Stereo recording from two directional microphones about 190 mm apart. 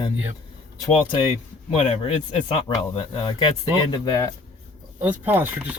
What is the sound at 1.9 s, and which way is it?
Speech, 30° left (ahead or behind).